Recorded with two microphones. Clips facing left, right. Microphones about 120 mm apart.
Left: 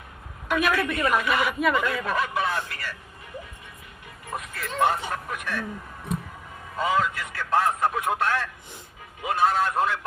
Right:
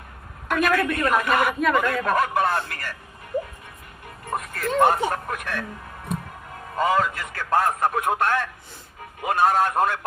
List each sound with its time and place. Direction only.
0.6 s a man's voice: 50° right (ahead or behind)
4.3 s a man's voice: 45° right (ahead or behind)
6.7 s a man's voice: 45° right (ahead or behind)